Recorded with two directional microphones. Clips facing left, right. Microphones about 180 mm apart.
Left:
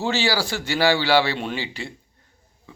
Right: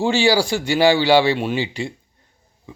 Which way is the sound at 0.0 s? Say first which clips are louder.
Right 6 dB; 15° right (ahead or behind).